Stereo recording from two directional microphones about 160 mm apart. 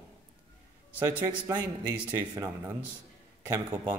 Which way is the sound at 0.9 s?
20° right (ahead or behind).